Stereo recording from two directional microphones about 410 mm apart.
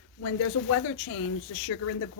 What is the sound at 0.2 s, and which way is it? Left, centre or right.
A woman's voice, left.